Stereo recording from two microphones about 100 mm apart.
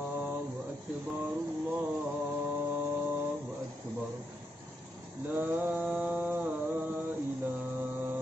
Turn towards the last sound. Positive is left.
turn(degrees=-20)  # may be behind; listen again after turning